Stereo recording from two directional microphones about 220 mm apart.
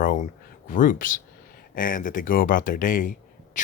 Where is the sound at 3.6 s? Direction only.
35° left (ahead or behind).